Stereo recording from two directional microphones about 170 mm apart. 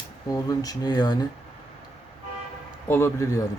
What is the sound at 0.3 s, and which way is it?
Speech, 20° left (ahead or behind).